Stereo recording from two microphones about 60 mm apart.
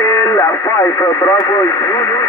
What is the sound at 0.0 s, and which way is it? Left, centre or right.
Speech, left.